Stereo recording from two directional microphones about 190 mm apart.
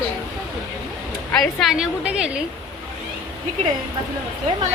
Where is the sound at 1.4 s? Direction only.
Centre (ahead or behind).